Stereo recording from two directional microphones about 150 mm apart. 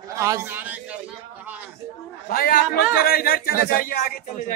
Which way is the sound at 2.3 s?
75° left (ahead or behind).